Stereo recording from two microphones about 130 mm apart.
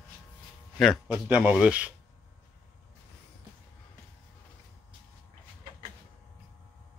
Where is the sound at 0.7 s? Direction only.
Centre (ahead or behind).